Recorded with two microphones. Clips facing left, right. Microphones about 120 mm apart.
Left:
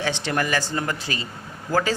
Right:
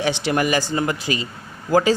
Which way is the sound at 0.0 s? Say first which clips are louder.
Right 4 dB; 15° right (ahead or behind).